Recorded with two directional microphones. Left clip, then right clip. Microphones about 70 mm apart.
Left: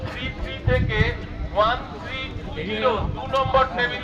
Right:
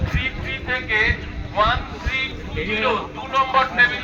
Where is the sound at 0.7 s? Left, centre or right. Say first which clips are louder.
Right 4 dB; left.